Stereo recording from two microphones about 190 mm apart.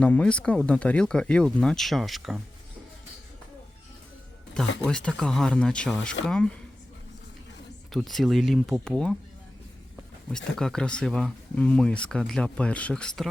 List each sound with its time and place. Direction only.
0.0 s speech: 5° left (ahead or behind)
4.6 s speech: 5° left (ahead or behind)
7.9 s speech: centre (ahead or behind)
10.3 s speech: 5° left (ahead or behind)